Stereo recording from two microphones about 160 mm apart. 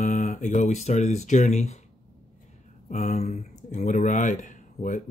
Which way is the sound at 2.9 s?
45° left (ahead or behind).